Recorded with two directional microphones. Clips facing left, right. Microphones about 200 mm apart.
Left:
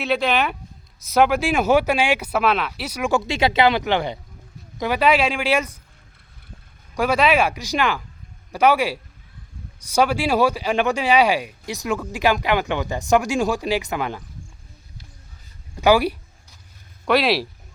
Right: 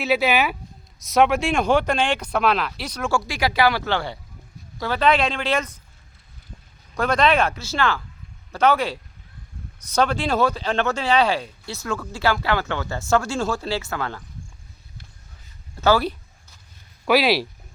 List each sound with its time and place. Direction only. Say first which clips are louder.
0.0 s speech: right 1 dB; 5° right (ahead or behind); by 5.7 s 10° left (ahead or behind)
6.9 s speech: left 1 dB; 10° left (ahead or behind)
15.7 s speech: left 3 dB; 15° left (ahead or behind)
17.1 s speech: even; centre (ahead or behind)